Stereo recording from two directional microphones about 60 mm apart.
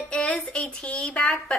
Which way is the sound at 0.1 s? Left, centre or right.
Centre.